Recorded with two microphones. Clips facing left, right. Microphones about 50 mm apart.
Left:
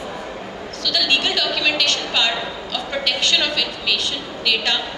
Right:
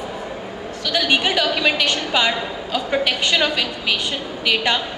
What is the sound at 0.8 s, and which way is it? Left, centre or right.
A woman's voice, centre.